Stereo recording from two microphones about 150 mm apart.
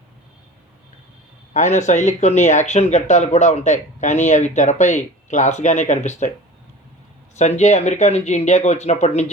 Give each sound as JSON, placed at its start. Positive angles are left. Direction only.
{"t": 1.5, "sound": "speech", "side_deg": 55}
{"t": 7.3, "sound": "speech", "side_deg": 50}